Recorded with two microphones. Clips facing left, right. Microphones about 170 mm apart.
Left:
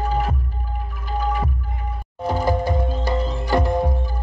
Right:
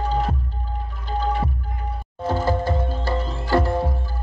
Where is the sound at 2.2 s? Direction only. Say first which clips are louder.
Left 1 dB; 15° left (ahead or behind).